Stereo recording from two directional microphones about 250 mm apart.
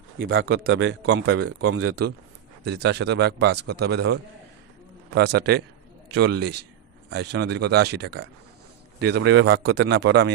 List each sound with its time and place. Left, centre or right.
0.2 s speech: right
2.6 s a man's voice: right